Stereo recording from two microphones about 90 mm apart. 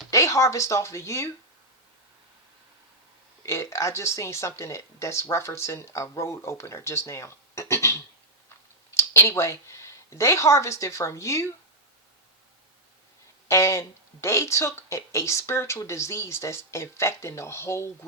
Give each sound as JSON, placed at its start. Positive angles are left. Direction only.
{"t": 0.1, "sound": "speech", "side_deg": 35}
{"t": 3.4, "sound": "speech", "side_deg": 30}
{"t": 13.5, "sound": "speech", "side_deg": 35}